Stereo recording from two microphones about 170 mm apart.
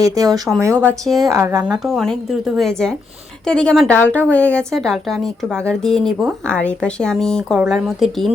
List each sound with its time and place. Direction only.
0.0 s speech: 20° right (ahead or behind)
0.8 s speech: 10° left (ahead or behind)
1.2 s speech: 20° right (ahead or behind); by 8.3 s centre (ahead or behind)